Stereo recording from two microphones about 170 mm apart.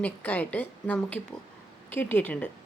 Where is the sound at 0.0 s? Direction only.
10° left (ahead or behind).